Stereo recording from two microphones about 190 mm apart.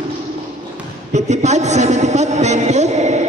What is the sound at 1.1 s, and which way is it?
A man's voice, 35° right (ahead or behind).